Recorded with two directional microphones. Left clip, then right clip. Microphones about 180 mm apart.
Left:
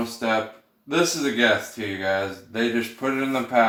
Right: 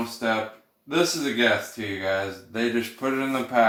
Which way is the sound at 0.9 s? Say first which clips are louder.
Left 1 dB; 10° right (ahead or behind).